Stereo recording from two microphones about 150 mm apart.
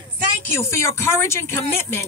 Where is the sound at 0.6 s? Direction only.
20° left (ahead or behind).